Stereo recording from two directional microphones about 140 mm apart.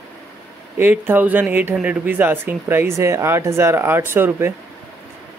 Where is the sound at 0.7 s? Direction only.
15° right (ahead or behind).